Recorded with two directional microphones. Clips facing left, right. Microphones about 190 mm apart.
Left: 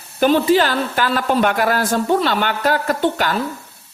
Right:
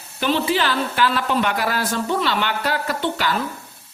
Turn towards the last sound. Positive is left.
turn(degrees=50)  # may be behind; listen again after turning